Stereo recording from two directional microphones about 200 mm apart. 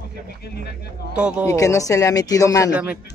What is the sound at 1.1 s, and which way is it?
Speech, 5° right (ahead or behind).